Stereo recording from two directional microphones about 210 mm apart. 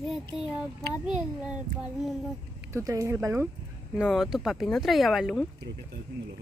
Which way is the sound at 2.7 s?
15° right (ahead or behind).